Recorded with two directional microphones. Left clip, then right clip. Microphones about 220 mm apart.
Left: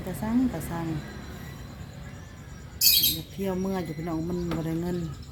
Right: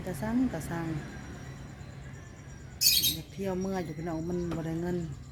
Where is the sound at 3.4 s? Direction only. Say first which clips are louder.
Left 3 dB; centre (ahead or behind).